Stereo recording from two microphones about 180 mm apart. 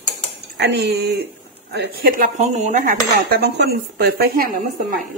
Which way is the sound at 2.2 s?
40° right (ahead or behind).